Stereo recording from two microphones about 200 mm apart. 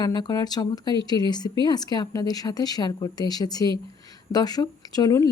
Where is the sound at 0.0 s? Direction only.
20° left (ahead or behind).